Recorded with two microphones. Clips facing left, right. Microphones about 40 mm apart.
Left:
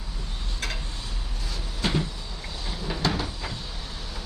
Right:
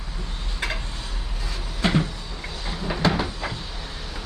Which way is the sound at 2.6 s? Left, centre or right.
Centre.